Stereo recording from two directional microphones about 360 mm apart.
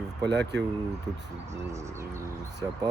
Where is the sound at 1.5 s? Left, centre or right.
Centre.